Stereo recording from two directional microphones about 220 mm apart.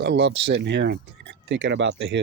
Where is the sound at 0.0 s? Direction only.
50° right (ahead or behind).